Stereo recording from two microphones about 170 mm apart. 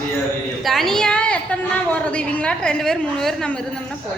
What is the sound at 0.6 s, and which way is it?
A woman's voice, centre (ahead or behind).